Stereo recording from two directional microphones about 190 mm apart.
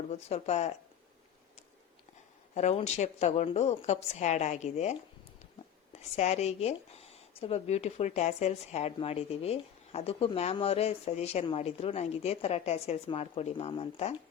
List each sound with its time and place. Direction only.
0.1 s speech: 35° left (ahead or behind)
2.6 s speech: 35° left (ahead or behind)